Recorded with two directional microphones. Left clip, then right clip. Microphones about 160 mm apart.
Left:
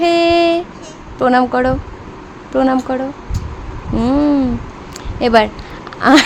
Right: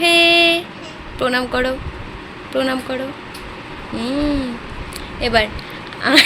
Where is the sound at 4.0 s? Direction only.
45° left (ahead or behind).